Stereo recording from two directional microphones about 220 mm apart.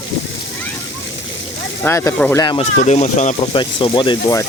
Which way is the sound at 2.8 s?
30° left (ahead or behind).